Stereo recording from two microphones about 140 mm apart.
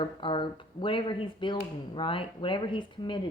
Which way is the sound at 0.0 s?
35° left (ahead or behind).